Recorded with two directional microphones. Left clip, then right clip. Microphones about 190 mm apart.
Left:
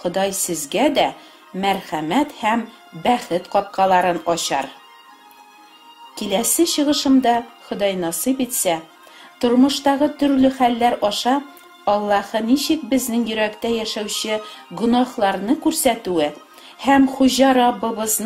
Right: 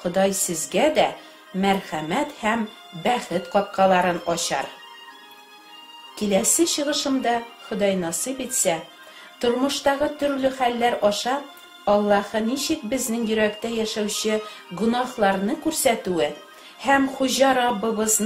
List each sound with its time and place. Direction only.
0.0 s speech: 45° left (ahead or behind)
6.1 s speech: 45° left (ahead or behind)